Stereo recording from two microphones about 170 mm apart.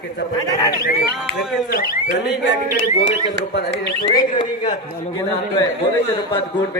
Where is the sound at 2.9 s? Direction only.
45° left (ahead or behind).